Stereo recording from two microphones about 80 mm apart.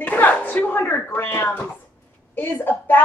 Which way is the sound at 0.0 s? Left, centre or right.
Left.